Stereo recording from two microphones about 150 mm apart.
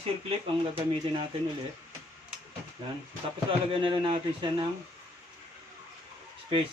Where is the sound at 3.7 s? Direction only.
35° right (ahead or behind).